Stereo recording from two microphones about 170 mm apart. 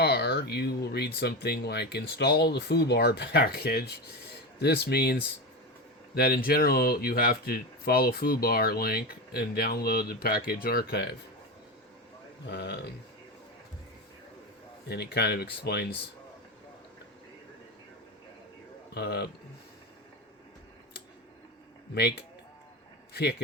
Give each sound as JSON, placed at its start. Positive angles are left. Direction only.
{"t": 0.0, "sound": "speech", "side_deg": 75}
{"t": 12.5, "sound": "speech", "side_deg": 70}
{"t": 14.8, "sound": "speech", "side_deg": 75}
{"t": 18.9, "sound": "speech", "side_deg": 70}